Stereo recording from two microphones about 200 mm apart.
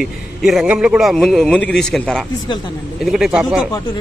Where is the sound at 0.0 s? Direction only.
Centre (ahead or behind).